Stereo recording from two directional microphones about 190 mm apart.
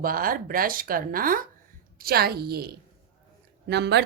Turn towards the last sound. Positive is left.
turn(degrees=-60)  # may be behind; listen again after turning